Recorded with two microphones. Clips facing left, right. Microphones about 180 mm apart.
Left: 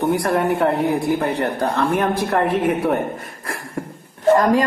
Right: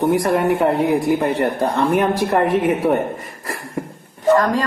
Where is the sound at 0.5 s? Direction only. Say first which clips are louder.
Right 2 dB; 5° right (ahead or behind).